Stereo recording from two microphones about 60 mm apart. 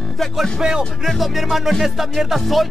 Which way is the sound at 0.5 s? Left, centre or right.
Centre.